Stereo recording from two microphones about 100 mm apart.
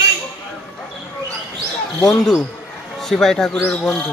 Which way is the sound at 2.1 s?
Centre (ahead or behind).